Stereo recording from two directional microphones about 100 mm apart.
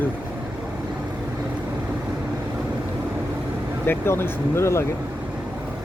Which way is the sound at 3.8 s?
25° left (ahead or behind).